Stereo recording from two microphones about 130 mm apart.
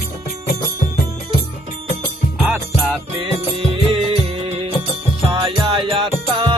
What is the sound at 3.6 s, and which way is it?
Music, 45° right (ahead or behind).